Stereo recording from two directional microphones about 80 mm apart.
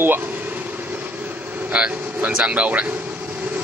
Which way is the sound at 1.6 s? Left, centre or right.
Centre.